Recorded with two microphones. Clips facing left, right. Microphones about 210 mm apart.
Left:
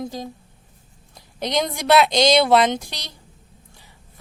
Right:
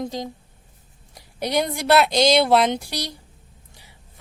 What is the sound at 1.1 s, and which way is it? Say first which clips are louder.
Speech: even; 10° right (ahead or behind).